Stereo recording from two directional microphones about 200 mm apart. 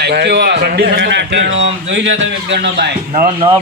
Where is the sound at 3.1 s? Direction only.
35° right (ahead or behind).